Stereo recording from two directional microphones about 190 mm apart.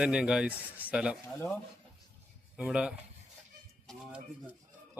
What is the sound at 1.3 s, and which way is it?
Speech, 15° left (ahead or behind).